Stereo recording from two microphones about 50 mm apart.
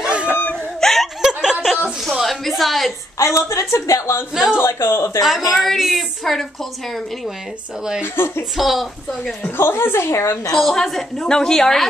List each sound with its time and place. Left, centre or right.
0.0 s whimper: right
0.7 s laughter: centre
1.2 s a sound: centre
3.2 s a woman's voice: left
4.6 s speech: left
5.2 s a woman's voice: centre
8.0 s a woman's voice: left
8.5 s a woman's voice: centre
9.6 s a woman's voice: left
10.5 s a woman's voice: centre